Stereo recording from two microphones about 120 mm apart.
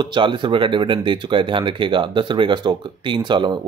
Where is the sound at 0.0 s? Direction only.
40° right (ahead or behind).